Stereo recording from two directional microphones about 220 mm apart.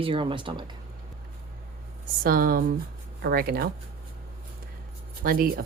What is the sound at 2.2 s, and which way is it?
Speech, 40° right (ahead or behind).